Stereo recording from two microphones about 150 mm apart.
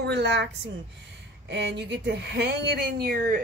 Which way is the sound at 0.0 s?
90° right.